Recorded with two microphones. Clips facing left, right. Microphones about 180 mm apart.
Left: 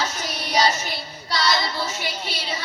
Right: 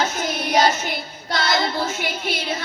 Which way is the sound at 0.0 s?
50° right (ahead or behind).